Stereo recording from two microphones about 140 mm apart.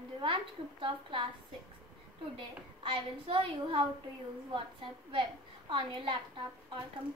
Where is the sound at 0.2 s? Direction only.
40° right (ahead or behind).